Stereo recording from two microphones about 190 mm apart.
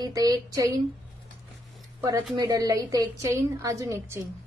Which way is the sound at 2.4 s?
20° right (ahead or behind).